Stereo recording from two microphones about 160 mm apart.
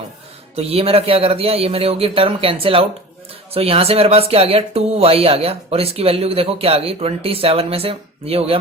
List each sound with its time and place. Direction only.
0.5 s speech: 35° right (ahead or behind)